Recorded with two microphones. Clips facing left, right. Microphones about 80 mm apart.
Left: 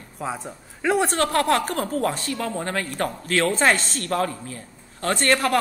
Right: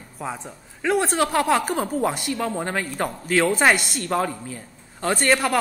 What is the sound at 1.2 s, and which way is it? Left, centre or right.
Speech, centre.